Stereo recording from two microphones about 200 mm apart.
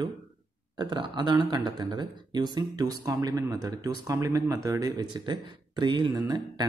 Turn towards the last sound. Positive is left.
turn(degrees=-20)  # may be behind; listen again after turning